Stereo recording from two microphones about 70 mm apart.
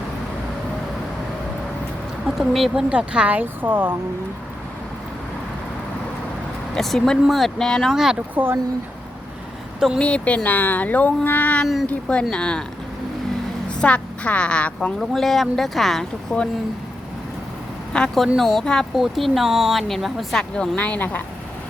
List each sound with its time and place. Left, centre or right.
2.2 s speech: centre
2.7 s speech: centre
6.7 s speech: centre
10.0 s speech: centre
11.6 s speech: centre
11.9 s speech: centre
13.7 s a woman's voice: centre
15.1 s speech: centre
17.9 s speech: centre
18.9 s speech: centre
20.6 s speech: centre